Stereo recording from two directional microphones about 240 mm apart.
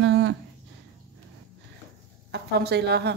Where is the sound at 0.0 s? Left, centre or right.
Right.